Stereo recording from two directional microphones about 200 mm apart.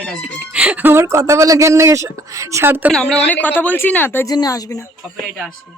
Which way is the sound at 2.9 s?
5° left (ahead or behind).